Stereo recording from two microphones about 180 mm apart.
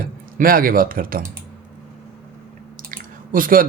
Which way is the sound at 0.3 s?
55° right (ahead or behind).